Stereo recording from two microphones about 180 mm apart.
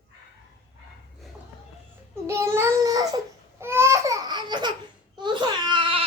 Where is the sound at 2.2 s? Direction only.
15° right (ahead or behind).